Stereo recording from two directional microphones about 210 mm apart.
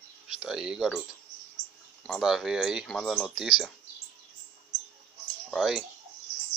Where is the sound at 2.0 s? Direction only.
Centre (ahead or behind).